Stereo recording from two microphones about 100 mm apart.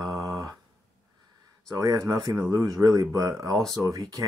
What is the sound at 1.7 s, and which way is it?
Speech, 30° right (ahead or behind).